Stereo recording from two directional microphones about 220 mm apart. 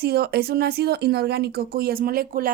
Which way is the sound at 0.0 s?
45° right (ahead or behind).